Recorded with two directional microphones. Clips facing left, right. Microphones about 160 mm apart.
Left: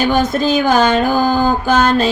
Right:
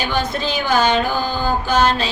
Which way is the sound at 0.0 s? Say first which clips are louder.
Left 7 dB; 45° left (ahead or behind).